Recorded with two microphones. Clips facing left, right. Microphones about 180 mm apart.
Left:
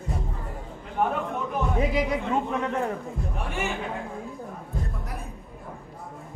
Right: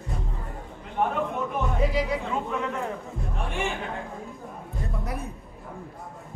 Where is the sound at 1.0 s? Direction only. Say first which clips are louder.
Left 1 dB; centre (ahead or behind).